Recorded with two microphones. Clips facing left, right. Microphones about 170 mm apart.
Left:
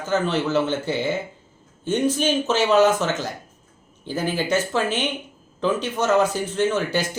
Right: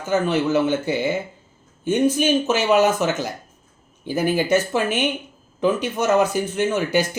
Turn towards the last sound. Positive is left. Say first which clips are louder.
# right 3 dB
turn(degrees=-10)  # may be behind; listen again after turning